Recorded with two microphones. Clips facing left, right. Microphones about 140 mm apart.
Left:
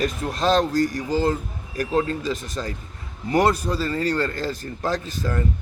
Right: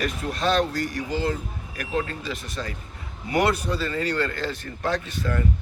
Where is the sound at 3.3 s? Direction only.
35° left (ahead or behind).